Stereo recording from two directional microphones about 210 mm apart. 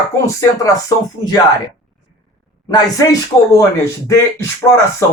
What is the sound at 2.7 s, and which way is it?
Speech, 15° left (ahead or behind).